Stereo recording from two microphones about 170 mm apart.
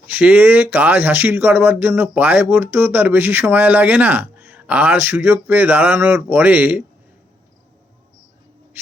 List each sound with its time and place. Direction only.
0.1 s speech: 10° right (ahead or behind)